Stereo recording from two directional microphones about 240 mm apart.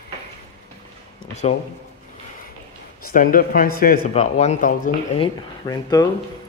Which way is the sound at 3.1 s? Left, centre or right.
Left.